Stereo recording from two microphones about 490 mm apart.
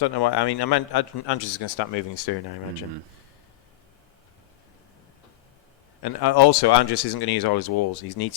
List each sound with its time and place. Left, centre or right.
0.0 s a man's voice: left
6.0 s a man's voice: left